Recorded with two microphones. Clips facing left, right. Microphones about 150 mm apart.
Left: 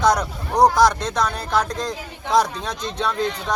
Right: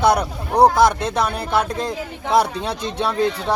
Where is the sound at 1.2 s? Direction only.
25° right (ahead or behind).